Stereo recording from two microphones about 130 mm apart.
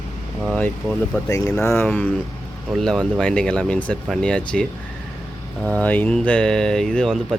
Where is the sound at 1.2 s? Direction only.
25° left (ahead or behind).